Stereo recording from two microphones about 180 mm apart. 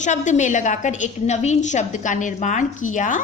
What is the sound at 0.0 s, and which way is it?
A woman's voice, 40° left (ahead or behind).